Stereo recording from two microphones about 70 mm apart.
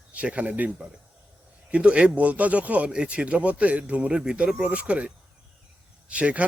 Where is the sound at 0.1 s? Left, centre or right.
Centre.